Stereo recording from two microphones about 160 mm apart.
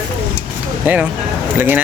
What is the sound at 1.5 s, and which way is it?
Speech, 15° right (ahead or behind).